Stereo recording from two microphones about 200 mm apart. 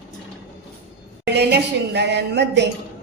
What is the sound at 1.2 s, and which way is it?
A woman's voice, 55° right (ahead or behind).